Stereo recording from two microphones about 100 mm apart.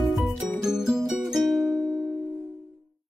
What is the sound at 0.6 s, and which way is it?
Music, 5° right (ahead or behind).